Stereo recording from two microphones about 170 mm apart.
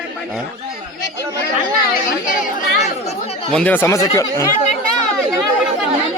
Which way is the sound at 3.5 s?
10° left (ahead or behind).